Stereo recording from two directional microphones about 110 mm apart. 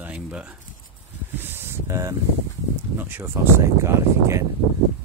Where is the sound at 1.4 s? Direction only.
20° right (ahead or behind).